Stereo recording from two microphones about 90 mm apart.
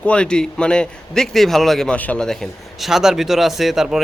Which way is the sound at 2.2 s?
Centre (ahead or behind).